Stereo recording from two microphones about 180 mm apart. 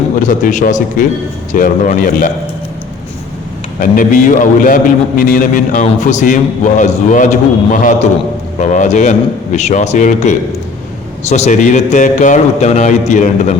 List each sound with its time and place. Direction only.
0.2 s a man's voice: 45° left (ahead or behind)
3.8 s a man's voice: 45° left (ahead or behind)